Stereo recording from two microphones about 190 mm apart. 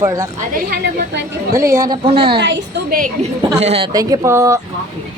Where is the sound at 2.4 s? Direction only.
65° right (ahead or behind).